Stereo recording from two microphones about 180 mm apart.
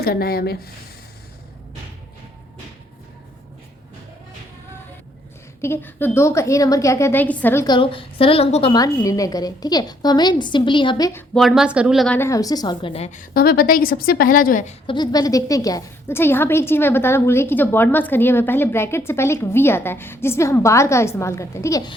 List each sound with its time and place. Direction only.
0.0 s a woman's voice: 60° left (ahead or behind)
5.6 s a woman's voice: 10° left (ahead or behind)
11.3 s a woman's voice: centre (ahead or behind); by 14.8 s 45° left (ahead or behind)
14.8 s a woman's voice: 25° left (ahead or behind)